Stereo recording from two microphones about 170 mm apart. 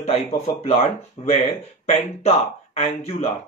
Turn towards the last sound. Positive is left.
turn(degrees=35)  # may be behind; listen again after turning